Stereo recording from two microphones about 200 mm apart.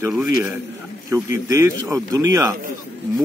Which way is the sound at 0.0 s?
5° right (ahead or behind).